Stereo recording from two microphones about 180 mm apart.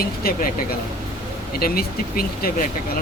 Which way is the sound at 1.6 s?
55° left (ahead or behind).